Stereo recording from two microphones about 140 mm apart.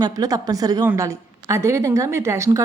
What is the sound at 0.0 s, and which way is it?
A woman's voice, 25° right (ahead or behind).